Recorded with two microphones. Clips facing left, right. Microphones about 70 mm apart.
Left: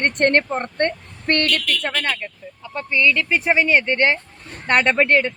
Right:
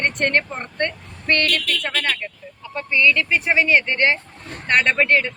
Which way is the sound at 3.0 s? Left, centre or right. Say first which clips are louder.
Even; centre.